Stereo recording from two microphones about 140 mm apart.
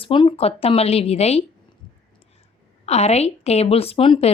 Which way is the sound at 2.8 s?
50° left (ahead or behind).